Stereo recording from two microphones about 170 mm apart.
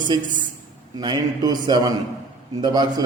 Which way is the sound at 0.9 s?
25° right (ahead or behind).